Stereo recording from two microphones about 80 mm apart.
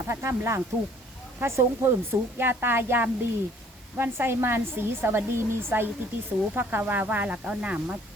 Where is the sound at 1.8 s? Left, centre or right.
Right.